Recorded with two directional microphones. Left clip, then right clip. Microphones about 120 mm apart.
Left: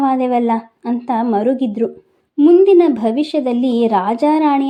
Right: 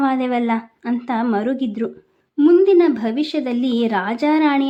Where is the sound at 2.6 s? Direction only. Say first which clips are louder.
Left 4 dB; 20° left (ahead or behind).